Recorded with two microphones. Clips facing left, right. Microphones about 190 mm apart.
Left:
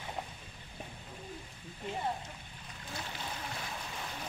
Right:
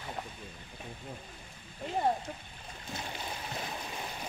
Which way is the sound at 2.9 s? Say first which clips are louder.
Right 2 dB; 20° right (ahead or behind).